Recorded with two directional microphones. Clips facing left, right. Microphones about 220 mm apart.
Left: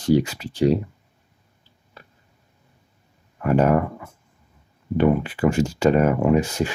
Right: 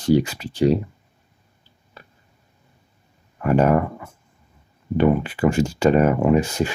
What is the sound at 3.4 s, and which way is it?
Speech, 25° right (ahead or behind).